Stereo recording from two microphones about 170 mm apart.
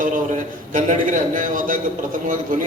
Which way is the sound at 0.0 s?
50° right (ahead or behind).